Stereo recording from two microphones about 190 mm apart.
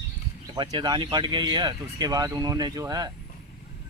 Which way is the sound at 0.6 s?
25° right (ahead or behind).